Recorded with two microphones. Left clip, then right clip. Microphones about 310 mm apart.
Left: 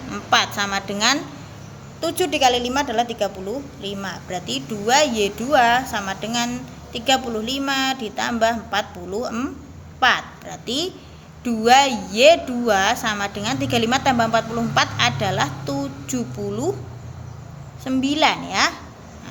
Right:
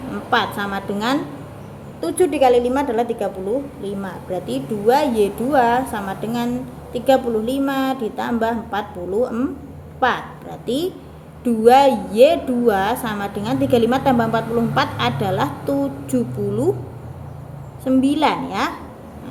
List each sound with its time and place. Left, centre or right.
0.1 s a woman's voice: centre
17.8 s a woman's voice: centre